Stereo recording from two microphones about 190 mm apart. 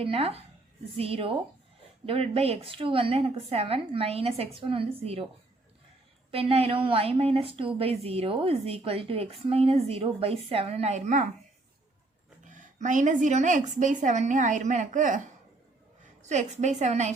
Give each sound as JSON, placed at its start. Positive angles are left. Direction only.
{"t": 0.0, "sound": "a woman's voice", "side_deg": -30}
{"t": 6.3, "sound": "a woman's voice", "side_deg": -30}
{"t": 12.4, "sound": "a woman's voice", "side_deg": -40}
{"t": 16.2, "sound": "a woman's voice", "side_deg": -40}